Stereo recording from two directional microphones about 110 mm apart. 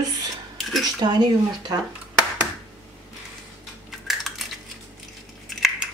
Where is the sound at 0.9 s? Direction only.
40° right (ahead or behind).